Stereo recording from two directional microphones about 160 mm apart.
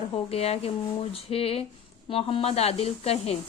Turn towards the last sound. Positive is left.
turn(degrees=40)  # may be behind; listen again after turning